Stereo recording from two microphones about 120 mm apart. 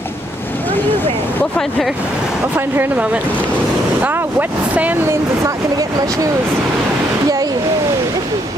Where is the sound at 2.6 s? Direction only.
15° right (ahead or behind); by 6.3 s 30° right (ahead or behind).